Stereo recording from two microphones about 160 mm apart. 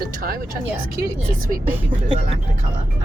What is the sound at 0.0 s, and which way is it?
Speech, 65° right (ahead or behind).